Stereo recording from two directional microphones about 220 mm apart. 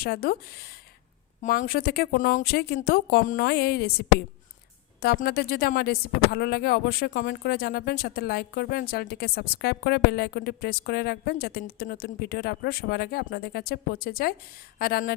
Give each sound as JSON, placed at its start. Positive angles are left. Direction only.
{"t": 0.0, "sound": "speech", "side_deg": 40}